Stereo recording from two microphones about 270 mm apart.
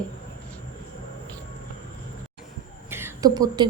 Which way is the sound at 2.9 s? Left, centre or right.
Centre.